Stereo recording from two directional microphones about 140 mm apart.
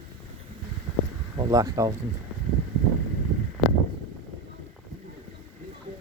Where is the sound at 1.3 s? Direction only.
25° right (ahead or behind).